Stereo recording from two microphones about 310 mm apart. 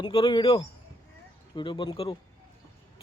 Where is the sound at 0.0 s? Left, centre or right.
Centre.